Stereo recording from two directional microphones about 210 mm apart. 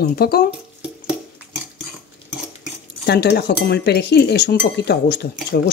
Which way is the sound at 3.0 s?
50° left (ahead or behind).